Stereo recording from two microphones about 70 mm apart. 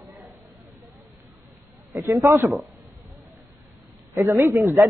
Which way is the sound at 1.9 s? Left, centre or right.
Right.